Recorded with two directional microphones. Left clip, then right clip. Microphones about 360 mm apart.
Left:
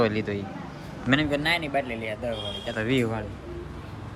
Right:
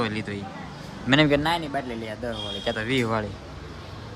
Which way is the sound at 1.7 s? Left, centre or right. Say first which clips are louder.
Left 2 dB; right.